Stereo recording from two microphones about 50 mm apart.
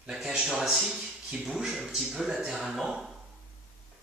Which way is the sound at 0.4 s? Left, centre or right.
Right.